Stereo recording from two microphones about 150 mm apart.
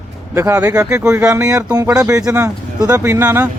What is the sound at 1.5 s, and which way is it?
Speech, 25° right (ahead or behind).